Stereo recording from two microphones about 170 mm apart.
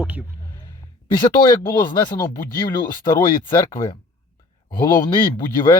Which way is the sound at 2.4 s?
60° left (ahead or behind).